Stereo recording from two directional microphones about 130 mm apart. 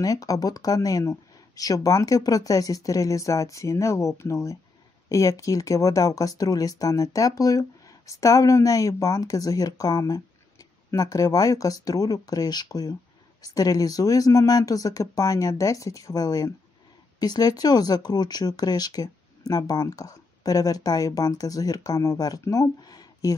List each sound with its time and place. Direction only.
0.0 s speech: 25° left (ahead or behind)